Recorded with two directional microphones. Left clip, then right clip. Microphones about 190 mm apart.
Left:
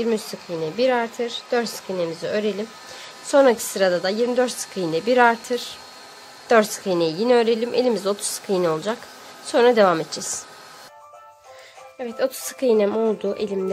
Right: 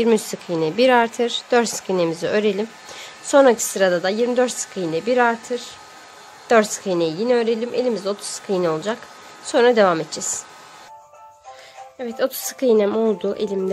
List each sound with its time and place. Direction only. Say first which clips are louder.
0.0 s a woman's voice: right 5 dB; 25° right (ahead or behind); by 10.2 s centre (ahead or behind)
12.0 s a woman's voice: right 1 dB; 10° right (ahead or behind)